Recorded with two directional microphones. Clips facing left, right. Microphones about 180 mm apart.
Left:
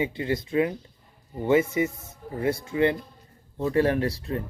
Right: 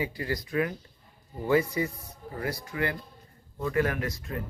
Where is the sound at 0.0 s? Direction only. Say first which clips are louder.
Left 5 dB; 25° left (ahead or behind).